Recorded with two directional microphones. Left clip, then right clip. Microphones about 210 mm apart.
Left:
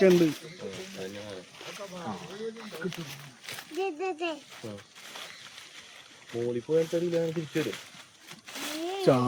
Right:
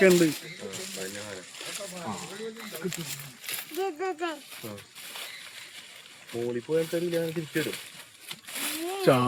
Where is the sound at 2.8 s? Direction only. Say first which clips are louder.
Right 2 dB; 35° right (ahead or behind).